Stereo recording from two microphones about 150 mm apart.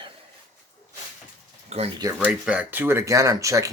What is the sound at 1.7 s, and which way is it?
Speech, 45° right (ahead or behind).